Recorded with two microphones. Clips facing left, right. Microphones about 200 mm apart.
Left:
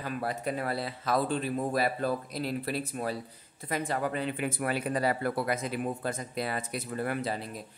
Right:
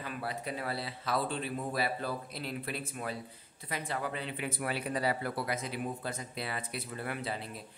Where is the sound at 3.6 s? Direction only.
45° left (ahead or behind).